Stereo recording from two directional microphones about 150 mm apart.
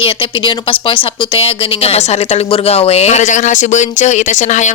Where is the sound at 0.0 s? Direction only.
35° left (ahead or behind).